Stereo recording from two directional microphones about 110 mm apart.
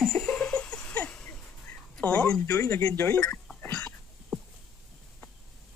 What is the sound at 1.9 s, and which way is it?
Speech, 10° left (ahead or behind).